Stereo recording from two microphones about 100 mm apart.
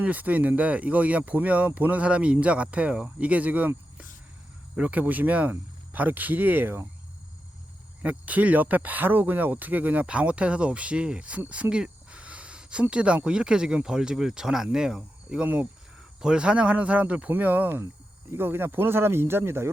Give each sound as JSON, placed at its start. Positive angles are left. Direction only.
{"t": 0.0, "sound": "speech", "side_deg": -15}
{"t": 8.0, "sound": "speech", "side_deg": -15}